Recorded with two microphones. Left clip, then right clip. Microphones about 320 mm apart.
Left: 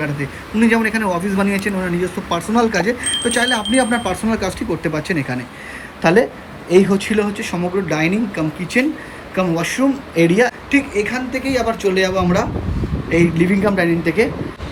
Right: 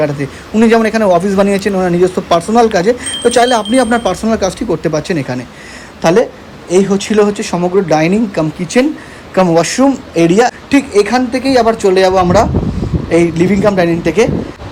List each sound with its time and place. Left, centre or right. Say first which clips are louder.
0.0 s a man's voice: right 8 dB; centre
11.8 s speech: right 8 dB; right
12.1 s speech: right 9 dB; centre